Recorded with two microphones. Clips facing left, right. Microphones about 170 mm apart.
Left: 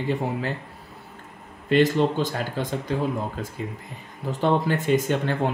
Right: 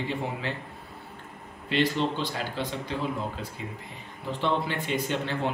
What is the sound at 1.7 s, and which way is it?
Speech, 45° left (ahead or behind).